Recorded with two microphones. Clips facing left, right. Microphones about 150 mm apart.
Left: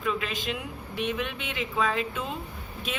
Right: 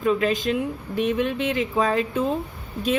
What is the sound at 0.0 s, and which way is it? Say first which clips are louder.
A woman's voice: right 9 dB; 40° right (ahead or behind).